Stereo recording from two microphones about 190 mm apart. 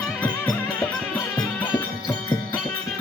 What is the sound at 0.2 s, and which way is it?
Music, 10° left (ahead or behind).